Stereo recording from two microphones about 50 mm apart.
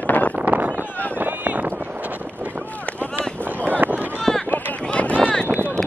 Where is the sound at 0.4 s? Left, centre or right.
Right.